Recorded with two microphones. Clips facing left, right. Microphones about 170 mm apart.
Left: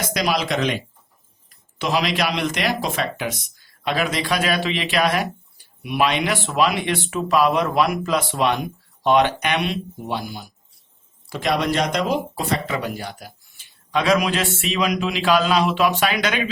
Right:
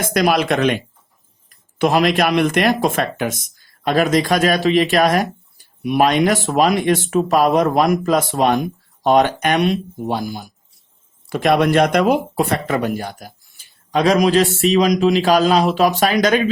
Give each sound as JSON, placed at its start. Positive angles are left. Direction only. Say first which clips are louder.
{"t": 0.0, "sound": "speech", "louder": "right 6 dB", "side_deg": -55}
{"t": 1.8, "sound": "speech", "louder": "right 6 dB", "side_deg": -50}
{"t": 11.3, "sound": "speech", "louder": "right 6 dB", "side_deg": -55}